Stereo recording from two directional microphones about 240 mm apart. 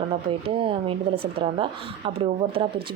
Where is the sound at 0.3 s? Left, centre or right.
Right.